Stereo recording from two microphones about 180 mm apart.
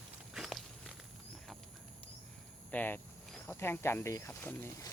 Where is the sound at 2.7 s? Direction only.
10° left (ahead or behind).